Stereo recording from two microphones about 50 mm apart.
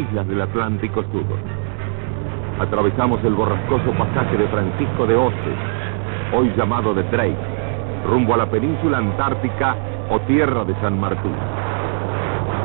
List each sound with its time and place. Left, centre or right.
0.4 s speech: left
2.6 s speech: left
11.7 s vehicle: left